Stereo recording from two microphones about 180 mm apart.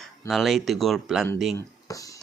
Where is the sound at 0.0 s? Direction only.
Centre (ahead or behind).